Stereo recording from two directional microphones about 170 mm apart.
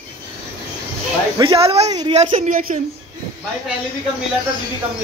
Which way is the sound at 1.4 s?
35° right (ahead or behind).